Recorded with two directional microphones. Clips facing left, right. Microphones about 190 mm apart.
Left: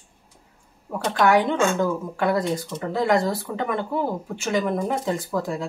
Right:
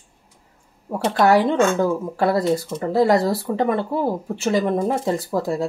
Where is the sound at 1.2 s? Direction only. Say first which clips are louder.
Right 3 dB; 35° right (ahead or behind).